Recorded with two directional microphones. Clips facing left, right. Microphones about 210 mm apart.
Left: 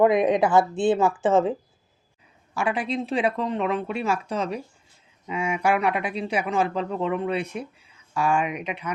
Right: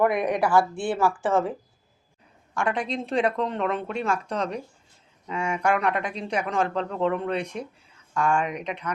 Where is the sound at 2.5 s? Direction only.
5° left (ahead or behind).